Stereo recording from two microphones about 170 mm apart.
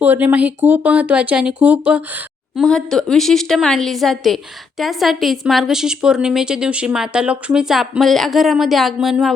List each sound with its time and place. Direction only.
0.0 s speech: 10° right (ahead or behind)
2.6 s a woman's voice: 5° left (ahead or behind)